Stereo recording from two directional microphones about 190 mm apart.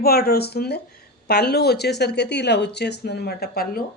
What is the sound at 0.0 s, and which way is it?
Speech, 55° left (ahead or behind).